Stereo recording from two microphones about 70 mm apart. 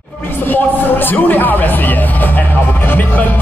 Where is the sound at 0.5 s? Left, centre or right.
Left.